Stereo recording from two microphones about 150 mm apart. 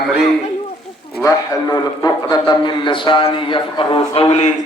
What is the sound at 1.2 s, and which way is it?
A man's voice, 25° left (ahead or behind).